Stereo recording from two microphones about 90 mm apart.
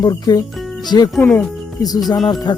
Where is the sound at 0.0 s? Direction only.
45° left (ahead or behind).